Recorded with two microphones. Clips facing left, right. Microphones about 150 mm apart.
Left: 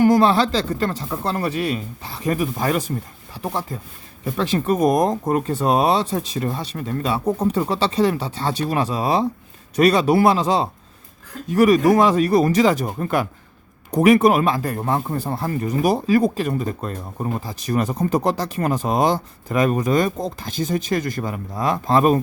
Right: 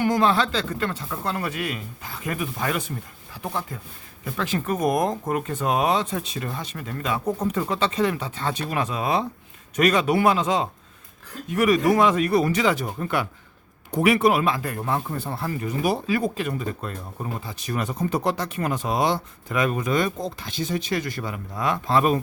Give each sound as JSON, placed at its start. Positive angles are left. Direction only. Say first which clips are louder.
{"t": 0.0, "sound": "speech", "louder": "left 6 dB", "side_deg": 35}